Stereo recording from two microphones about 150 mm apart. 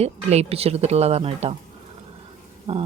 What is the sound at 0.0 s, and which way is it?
Speech, 45° right (ahead or behind).